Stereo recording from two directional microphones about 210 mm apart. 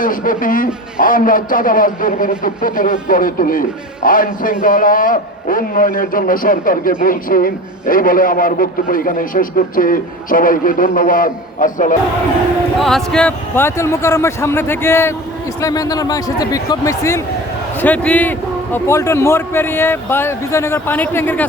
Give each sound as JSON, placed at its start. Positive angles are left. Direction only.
{"t": 0.0, "sound": "a man's voice", "side_deg": 40}
{"t": 12.8, "sound": "a man's voice", "side_deg": 0}